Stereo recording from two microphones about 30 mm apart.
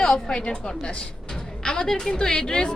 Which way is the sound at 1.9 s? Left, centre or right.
Centre.